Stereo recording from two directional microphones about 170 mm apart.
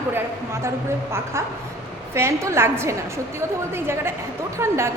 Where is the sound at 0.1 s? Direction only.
15° right (ahead or behind).